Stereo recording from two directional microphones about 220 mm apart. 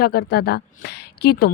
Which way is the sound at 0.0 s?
45° left (ahead or behind).